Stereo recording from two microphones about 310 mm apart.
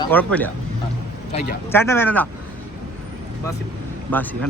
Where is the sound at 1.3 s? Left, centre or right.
Left.